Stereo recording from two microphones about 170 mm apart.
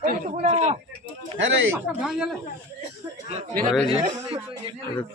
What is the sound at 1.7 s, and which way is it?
Speech, 5° right (ahead or behind).